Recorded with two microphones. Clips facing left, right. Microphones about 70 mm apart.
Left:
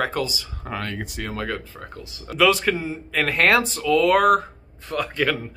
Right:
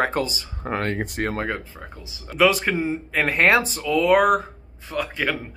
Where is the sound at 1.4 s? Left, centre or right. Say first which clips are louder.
Right 1 dB; right.